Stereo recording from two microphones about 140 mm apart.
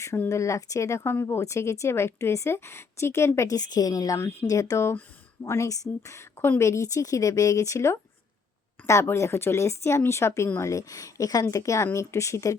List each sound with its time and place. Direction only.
0.0 s speech: 20° left (ahead or behind)